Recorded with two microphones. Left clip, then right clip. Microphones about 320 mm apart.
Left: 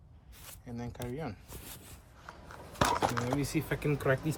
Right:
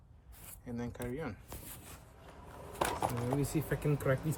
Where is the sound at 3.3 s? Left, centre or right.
Centre.